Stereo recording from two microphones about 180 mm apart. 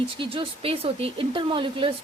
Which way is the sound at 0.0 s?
30° right (ahead or behind).